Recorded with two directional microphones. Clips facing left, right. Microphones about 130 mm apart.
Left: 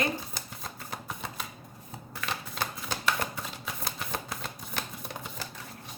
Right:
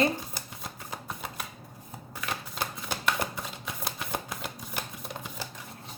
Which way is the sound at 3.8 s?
10° right (ahead or behind).